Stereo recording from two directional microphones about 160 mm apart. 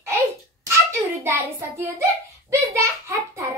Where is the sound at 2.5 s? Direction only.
20° right (ahead or behind).